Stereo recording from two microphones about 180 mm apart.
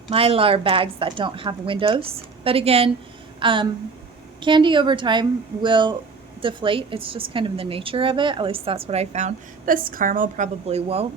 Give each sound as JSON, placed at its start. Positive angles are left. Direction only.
{"t": 0.1, "sound": "a woman's voice", "side_deg": -30}